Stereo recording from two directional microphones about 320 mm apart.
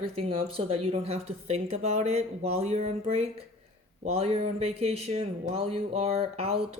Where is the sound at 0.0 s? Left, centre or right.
Centre.